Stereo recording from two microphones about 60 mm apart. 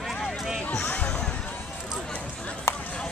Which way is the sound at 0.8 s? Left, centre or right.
Left.